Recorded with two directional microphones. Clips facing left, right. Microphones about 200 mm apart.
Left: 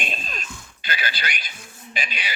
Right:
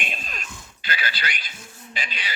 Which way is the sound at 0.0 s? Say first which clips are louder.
Left 3 dB; 30° left (ahead or behind).